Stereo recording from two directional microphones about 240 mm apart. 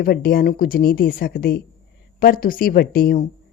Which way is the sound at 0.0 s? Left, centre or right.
Left.